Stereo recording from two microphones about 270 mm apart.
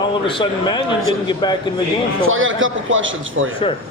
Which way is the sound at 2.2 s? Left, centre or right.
Right.